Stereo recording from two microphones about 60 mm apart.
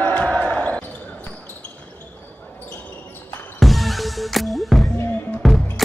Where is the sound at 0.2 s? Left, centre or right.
Centre.